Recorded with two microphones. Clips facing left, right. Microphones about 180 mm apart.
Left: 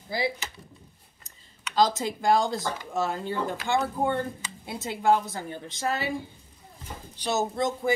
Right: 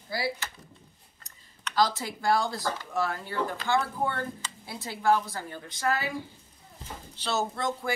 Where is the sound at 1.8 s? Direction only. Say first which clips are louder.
Left 3 dB; 20° left (ahead or behind).